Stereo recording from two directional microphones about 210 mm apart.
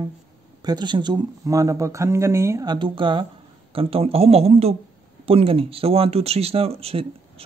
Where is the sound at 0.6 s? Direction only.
20° right (ahead or behind).